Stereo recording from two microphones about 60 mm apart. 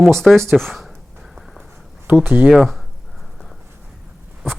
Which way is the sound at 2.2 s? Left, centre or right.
Right.